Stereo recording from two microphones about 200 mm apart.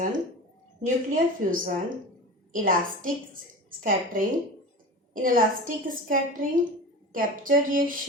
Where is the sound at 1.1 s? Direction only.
45° right (ahead or behind).